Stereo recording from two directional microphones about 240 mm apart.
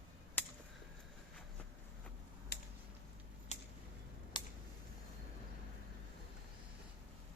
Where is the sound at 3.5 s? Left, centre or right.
Left.